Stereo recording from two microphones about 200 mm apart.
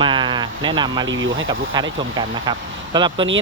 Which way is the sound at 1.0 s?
70° right (ahead or behind).